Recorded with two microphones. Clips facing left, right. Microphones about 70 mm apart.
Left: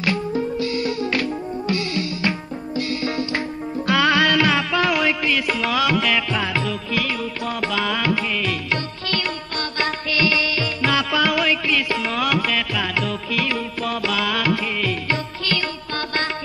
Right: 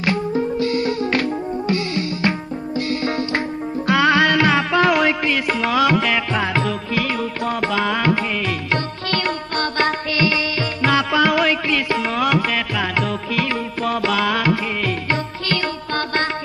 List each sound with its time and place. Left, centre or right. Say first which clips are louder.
0.0 s music: right 2 dB; right
3.9 s music: right 2 dB; right